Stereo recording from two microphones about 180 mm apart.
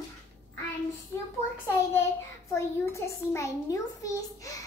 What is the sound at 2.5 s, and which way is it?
A child's voice, 15° left (ahead or behind).